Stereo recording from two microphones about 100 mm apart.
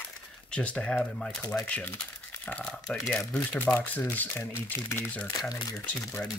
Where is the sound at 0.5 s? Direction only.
10° left (ahead or behind).